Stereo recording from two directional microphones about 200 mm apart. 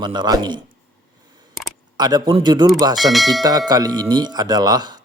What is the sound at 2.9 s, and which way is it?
Speech, centre (ahead or behind).